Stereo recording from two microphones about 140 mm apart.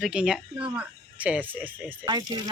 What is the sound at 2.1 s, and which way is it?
Speech, 30° right (ahead or behind).